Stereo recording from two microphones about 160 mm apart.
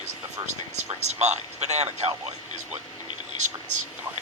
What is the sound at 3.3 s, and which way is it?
Speech, 50° right (ahead or behind).